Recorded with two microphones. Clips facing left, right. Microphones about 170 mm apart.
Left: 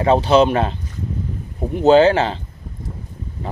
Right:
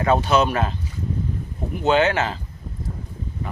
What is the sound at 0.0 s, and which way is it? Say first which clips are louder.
Speech: left 5 dB; 30° left (ahead or behind).